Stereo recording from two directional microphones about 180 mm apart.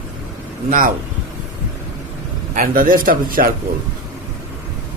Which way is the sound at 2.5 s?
50° right (ahead or behind).